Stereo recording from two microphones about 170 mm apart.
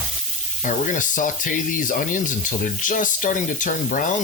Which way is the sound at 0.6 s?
50° left (ahead or behind).